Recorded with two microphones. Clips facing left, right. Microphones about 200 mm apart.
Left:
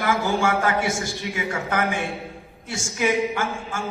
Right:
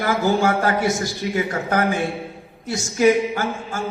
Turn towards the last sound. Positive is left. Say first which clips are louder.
# right 2 dB
turn(degrees=-40)  # may be behind; listen again after turning